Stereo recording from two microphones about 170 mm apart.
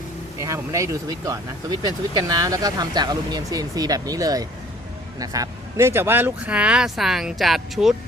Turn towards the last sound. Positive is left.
turn(degrees=0)  # may be behind; listen again after turning